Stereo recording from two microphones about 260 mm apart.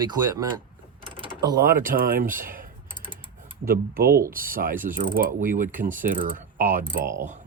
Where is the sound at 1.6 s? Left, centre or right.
Right.